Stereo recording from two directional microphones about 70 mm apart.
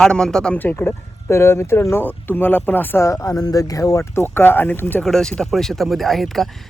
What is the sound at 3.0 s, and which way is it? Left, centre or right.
Speech, left.